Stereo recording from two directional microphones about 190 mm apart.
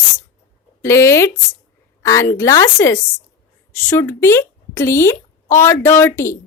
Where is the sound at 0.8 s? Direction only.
15° left (ahead or behind).